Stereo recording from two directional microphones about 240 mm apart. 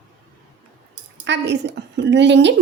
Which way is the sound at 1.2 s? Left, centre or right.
Right.